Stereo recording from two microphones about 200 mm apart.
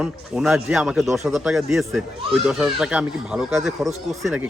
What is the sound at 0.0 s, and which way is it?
Speech, 5° right (ahead or behind).